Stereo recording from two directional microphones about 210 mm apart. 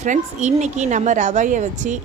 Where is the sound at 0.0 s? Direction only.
35° right (ahead or behind).